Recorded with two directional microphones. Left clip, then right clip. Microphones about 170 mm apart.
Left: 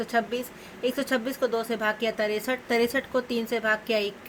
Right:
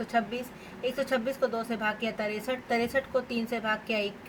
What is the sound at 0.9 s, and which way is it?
Speech, 65° left (ahead or behind).